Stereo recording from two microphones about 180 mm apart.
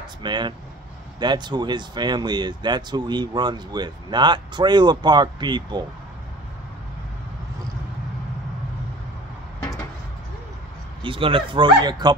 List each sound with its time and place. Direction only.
0.2 s speech: 25° right (ahead or behind)
11.0 s speech: 30° right (ahead or behind)